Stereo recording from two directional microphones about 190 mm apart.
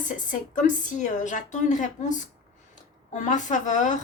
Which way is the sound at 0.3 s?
40° left (ahead or behind).